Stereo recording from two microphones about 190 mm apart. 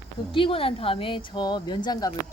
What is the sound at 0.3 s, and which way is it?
Speech, 25° left (ahead or behind).